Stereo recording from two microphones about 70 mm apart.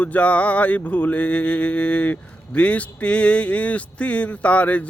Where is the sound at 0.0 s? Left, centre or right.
Centre.